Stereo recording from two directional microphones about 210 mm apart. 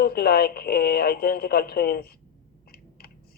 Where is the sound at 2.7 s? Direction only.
45° left (ahead or behind).